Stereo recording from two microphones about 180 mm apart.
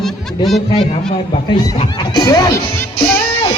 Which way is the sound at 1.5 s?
25° left (ahead or behind).